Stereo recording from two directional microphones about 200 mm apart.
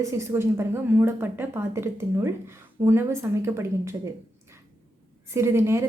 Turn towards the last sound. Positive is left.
turn(degrees=-15)  # may be behind; listen again after turning